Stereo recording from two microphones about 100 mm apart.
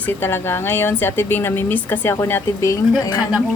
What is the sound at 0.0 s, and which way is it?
A woman's voice, 20° left (ahead or behind).